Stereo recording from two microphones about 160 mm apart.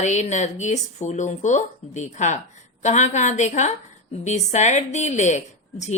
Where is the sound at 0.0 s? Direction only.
45° left (ahead or behind).